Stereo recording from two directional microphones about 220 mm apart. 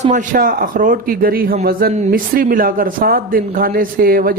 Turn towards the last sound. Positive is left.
turn(degrees=-40)  # may be behind; listen again after turning